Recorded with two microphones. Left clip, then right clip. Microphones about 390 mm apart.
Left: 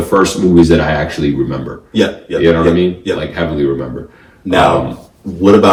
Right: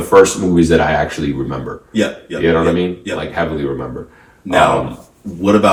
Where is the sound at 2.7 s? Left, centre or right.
Centre.